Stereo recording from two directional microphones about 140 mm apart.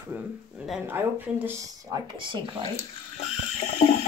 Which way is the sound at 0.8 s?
15° right (ahead or behind).